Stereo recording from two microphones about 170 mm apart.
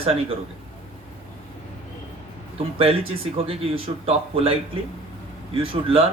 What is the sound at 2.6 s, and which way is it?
Speech, 35° right (ahead or behind).